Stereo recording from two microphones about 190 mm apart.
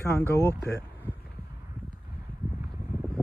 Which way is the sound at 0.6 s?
60° left (ahead or behind).